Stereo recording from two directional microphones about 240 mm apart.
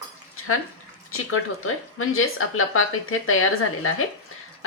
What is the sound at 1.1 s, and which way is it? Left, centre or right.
A woman's voice, left.